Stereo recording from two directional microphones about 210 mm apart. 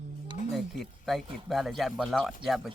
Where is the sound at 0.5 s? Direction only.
Centre (ahead or behind).